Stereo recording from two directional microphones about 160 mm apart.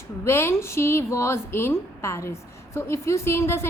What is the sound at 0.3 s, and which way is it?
A woman's voice, 15° left (ahead or behind).